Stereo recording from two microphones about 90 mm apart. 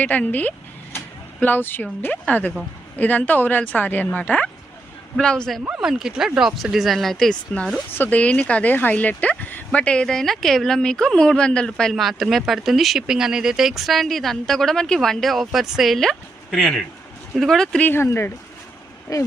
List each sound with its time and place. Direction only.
0.0 s speech: 15° left (ahead or behind)
5.8 s speech: 5° right (ahead or behind)
7.9 s speech: 20° left (ahead or behind)
17.8 s speech: 25° left (ahead or behind)
19.1 s speech: 40° left (ahead or behind)